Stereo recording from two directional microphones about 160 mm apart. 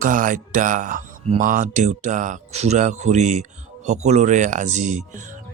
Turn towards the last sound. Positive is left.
turn(degrees=-50)  # may be behind; listen again after turning